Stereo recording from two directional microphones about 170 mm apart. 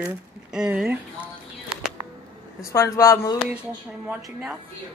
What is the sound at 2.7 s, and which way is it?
Speech, 20° left (ahead or behind).